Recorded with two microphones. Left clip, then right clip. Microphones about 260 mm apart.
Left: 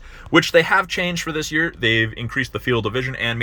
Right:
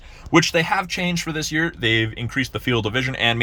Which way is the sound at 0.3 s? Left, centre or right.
Centre.